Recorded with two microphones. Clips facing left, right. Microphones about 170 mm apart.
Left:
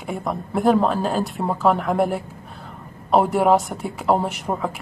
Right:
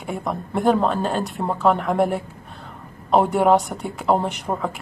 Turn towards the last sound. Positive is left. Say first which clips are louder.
# even
turn(degrees=0)  # may be behind; listen again after turning